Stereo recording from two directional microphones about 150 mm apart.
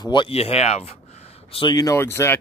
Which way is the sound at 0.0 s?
30° left (ahead or behind).